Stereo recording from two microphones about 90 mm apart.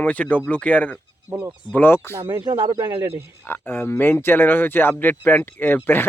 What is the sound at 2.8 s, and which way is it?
Speech, 35° right (ahead or behind).